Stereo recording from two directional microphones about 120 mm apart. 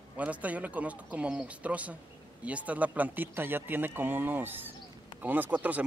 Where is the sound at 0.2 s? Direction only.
10° right (ahead or behind).